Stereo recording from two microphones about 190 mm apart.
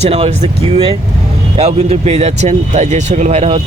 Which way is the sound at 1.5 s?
30° right (ahead or behind).